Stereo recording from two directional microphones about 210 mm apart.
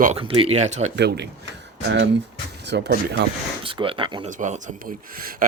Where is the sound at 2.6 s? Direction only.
55° right (ahead or behind).